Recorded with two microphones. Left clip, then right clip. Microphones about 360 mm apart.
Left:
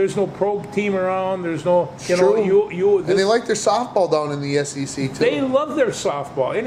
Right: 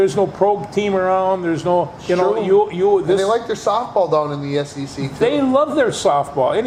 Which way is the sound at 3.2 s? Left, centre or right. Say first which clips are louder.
Even; left.